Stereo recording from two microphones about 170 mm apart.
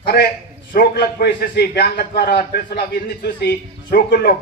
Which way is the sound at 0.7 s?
70° left (ahead or behind).